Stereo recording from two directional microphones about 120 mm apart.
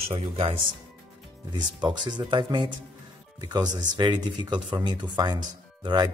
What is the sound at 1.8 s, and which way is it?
Speech, 40° right (ahead or behind).